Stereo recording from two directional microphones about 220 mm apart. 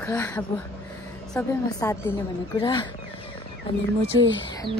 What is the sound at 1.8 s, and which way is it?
A woman's voice, 15° left (ahead or behind).